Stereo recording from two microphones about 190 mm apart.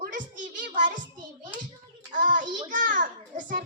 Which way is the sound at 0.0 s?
45° right (ahead or behind).